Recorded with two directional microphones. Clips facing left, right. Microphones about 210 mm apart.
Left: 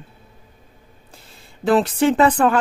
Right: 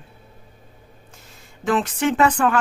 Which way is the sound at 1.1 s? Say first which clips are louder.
Left 1 dB; 35° left (ahead or behind).